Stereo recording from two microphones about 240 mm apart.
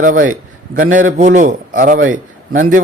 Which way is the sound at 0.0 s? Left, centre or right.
Right.